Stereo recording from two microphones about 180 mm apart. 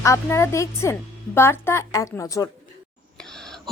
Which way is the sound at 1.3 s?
15° left (ahead or behind).